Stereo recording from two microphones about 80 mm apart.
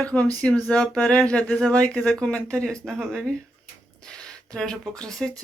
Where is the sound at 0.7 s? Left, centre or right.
Centre.